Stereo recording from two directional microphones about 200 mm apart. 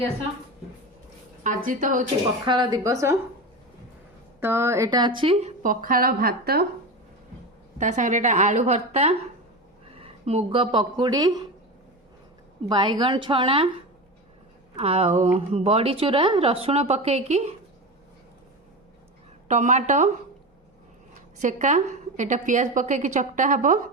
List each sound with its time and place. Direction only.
1.5 s speech: 40° right (ahead or behind)
2.4 s a woman's voice: 25° right (ahead or behind)
4.4 s a woman's voice: 10° right (ahead or behind); by 6.7 s 50° right (ahead or behind)
7.8 s a woman's voice: 40° right (ahead or behind); by 11.4 s 20° right (ahead or behind)
12.6 s a woman's voice: 20° right (ahead or behind)
14.8 s a woman's voice: 30° right (ahead or behind)
19.5 s a woman's voice: 35° right (ahead or behind)
21.3 s a woman's voice: 35° right (ahead or behind)